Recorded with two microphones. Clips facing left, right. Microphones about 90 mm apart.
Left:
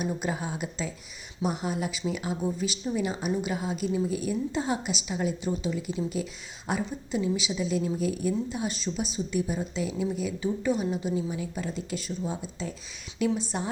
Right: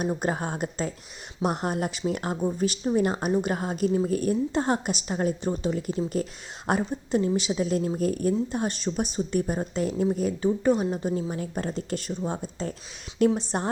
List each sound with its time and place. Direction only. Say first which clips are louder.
0.0 s speech: right 3 dB; 50° right (ahead or behind)